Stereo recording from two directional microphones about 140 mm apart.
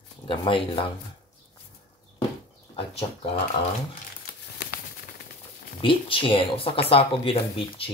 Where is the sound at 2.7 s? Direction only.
45° left (ahead or behind).